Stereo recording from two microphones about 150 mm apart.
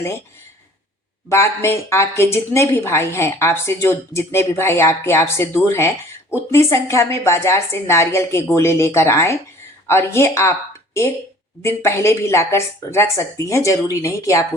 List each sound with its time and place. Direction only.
1.3 s a woman's voice: 15° left (ahead or behind)
11.6 s speech: 20° left (ahead or behind)